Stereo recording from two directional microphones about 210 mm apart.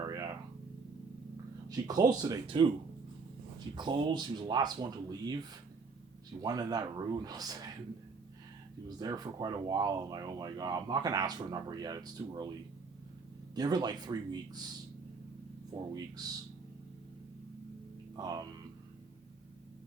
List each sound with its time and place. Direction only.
0.0 s a sound: 15° right (ahead or behind)
1.7 s speech: 20° right (ahead or behind)
3.8 s speech: 20° right (ahead or behind)
6.4 s speech: 20° right (ahead or behind)
9.0 s speech: 20° right (ahead or behind)
13.6 s speech: 20° right (ahead or behind)
18.2 s speech: 20° right (ahead or behind)